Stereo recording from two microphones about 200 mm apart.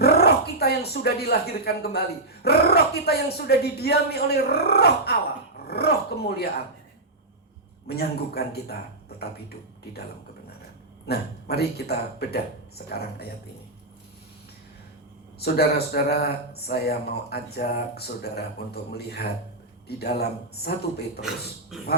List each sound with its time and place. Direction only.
0.0 s a sound: 55° left (ahead or behind)
2.4 s speech: 55° left (ahead or behind)
7.9 s speech: 50° left (ahead or behind)
11.1 s speech: 55° left (ahead or behind)
15.4 s speech: 50° left (ahead or behind)
21.7 s a sound: centre (ahead or behind)